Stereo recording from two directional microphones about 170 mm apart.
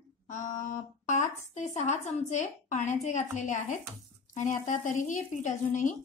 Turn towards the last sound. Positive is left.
turn(degrees=50)  # may be behind; listen again after turning